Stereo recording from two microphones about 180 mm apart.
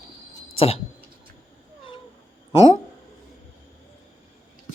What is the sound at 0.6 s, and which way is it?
Speech, 35° left (ahead or behind).